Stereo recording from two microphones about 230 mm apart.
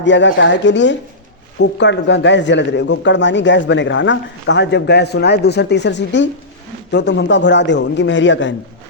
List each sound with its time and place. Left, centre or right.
0.0 s a man's voice: left